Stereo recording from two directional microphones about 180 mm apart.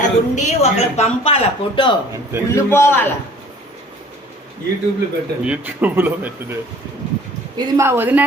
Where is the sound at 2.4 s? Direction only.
15° left (ahead or behind).